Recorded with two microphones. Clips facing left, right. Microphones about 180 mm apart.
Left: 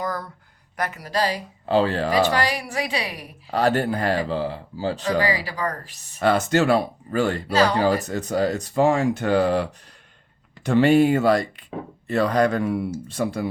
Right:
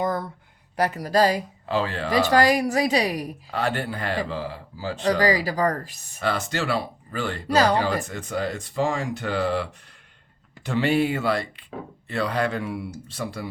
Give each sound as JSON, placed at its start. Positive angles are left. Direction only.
{"t": 0.0, "sound": "a sound", "side_deg": -25}
{"t": 0.8, "sound": "a woman's voice", "side_deg": -35}
{"t": 1.6, "sound": "speech", "side_deg": 35}
{"t": 2.3, "sound": "a woman's voice", "side_deg": -45}
{"t": 3.5, "sound": "speech", "side_deg": 40}
{"t": 5.0, "sound": "a woman's voice", "side_deg": -40}
{"t": 6.1, "sound": "speech", "side_deg": 45}
{"t": 7.4, "sound": "speech", "side_deg": -40}
{"t": 7.9, "sound": "speech", "side_deg": 40}